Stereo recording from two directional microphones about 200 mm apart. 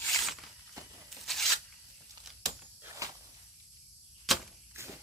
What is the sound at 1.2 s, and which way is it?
Tearing, centre (ahead or behind).